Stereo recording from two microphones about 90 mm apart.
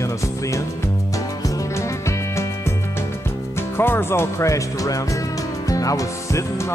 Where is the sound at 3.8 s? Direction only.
25° left (ahead or behind).